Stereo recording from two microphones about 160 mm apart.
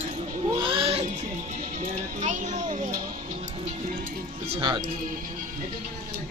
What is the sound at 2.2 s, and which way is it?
Music, 50° right (ahead or behind).